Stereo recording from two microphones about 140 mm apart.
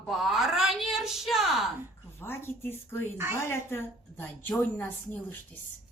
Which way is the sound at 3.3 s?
15° left (ahead or behind).